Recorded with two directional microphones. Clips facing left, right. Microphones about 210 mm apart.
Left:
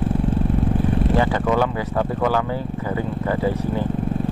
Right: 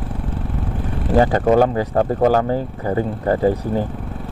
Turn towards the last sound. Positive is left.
turn(degrees=-45)  # may be behind; listen again after turning